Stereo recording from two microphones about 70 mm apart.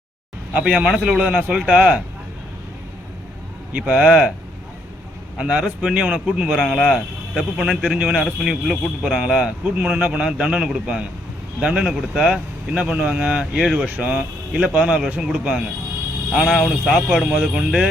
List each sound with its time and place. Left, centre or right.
0.5 s speech: centre
3.7 s speech: centre
5.4 s speech: centre
8.2 s speech: centre
13.8 s speech: right